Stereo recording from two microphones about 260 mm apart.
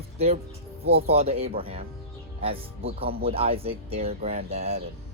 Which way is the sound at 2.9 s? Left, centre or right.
Right.